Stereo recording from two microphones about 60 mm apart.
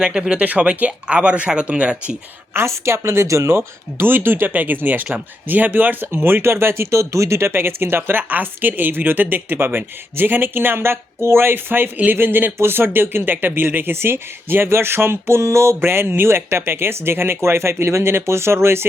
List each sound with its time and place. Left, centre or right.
0.0 s speech: centre
2.5 s speech: right